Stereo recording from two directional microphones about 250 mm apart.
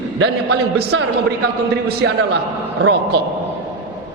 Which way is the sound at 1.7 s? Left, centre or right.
Right.